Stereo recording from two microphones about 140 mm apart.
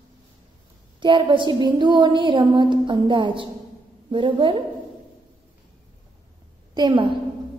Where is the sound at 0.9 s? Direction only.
35° right (ahead or behind).